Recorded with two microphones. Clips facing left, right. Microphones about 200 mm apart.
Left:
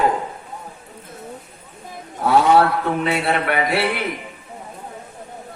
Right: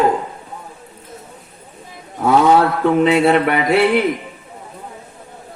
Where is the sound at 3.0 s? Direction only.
50° right (ahead or behind).